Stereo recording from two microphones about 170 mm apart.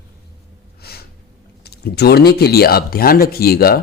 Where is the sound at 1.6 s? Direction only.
70° left (ahead or behind).